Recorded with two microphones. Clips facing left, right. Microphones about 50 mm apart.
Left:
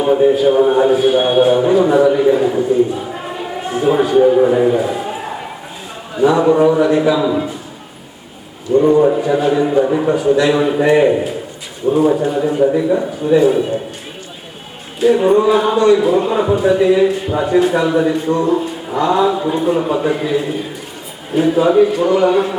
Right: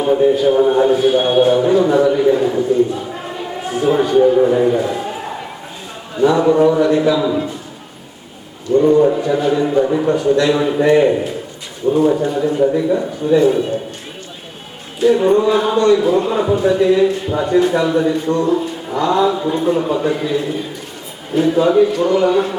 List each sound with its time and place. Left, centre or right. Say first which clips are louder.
0.0 s speech: left 1 dB; centre
8.7 s speech: left 1 dB; centre
15.0 s speech: left 1 dB; centre